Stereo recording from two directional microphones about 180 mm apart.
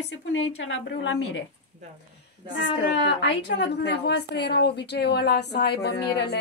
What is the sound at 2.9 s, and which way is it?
A woman's voice, 70° left (ahead or behind).